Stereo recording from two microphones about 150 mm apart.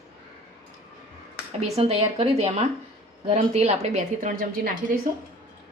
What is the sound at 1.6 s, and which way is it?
A woman's voice, 45° right (ahead or behind).